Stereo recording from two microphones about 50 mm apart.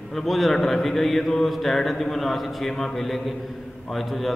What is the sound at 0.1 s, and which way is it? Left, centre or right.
Speech, centre.